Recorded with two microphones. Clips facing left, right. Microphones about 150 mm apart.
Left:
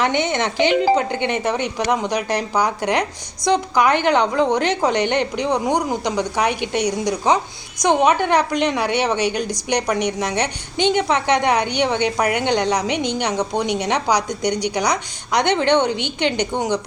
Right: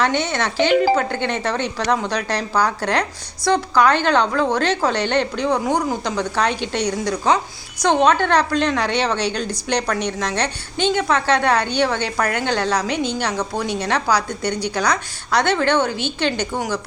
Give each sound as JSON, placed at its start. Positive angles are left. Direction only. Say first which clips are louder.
{"t": 0.0, "sound": "a woman's voice", "louder": "left 1 dB", "side_deg": 15}